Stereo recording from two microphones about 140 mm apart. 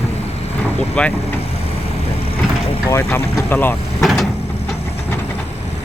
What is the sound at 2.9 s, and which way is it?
Speech, 15° left (ahead or behind).